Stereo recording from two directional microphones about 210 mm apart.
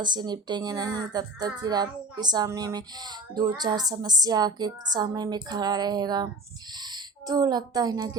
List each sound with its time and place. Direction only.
0.0 s speech: 20° right (ahead or behind)